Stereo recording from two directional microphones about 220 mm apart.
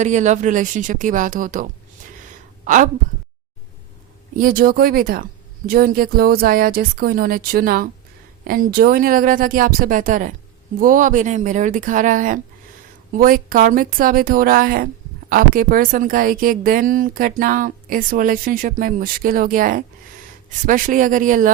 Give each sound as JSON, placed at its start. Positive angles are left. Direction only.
{"t": 0.0, "sound": "a woman's voice", "side_deg": -35}
{"t": 2.0, "sound": "a sound", "side_deg": -35}
{"t": 4.4, "sound": "a woman's voice", "side_deg": -40}